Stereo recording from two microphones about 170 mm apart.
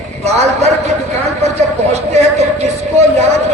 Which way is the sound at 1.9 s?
40° right (ahead or behind).